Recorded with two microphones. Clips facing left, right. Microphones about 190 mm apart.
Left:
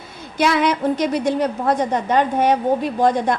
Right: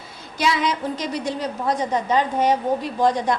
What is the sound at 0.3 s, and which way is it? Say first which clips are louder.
A woman's voice: left 4 dB; 60° left (ahead or behind).